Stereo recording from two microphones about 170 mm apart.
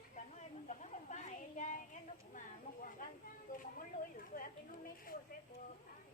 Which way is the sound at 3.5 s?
55° left (ahead or behind).